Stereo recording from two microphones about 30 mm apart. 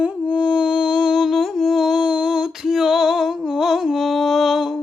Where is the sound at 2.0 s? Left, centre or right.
Right.